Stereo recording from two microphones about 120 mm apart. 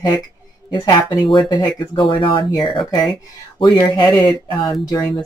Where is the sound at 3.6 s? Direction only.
35° left (ahead or behind).